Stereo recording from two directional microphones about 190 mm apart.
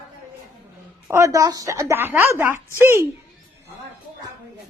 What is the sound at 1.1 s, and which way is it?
A woman's voice, 15° right (ahead or behind).